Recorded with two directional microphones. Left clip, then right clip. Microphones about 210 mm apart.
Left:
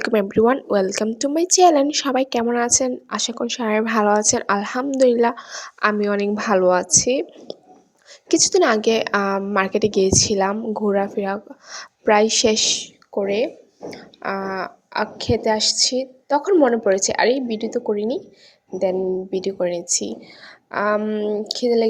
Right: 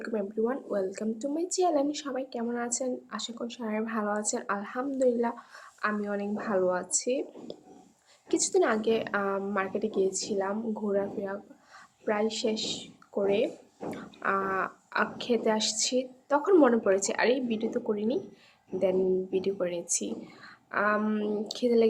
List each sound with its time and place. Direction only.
0.0 s speech: 40° left (ahead or behind)
13.1 s a woman's voice: 25° left (ahead or behind)